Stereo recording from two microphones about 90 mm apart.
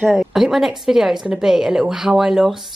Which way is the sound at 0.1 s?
5° right (ahead or behind).